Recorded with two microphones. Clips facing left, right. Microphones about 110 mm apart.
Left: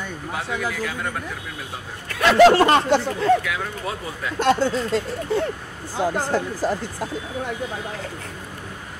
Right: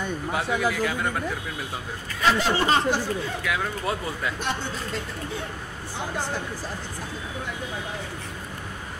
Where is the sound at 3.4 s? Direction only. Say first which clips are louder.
Right 1 dB; centre (ahead or behind).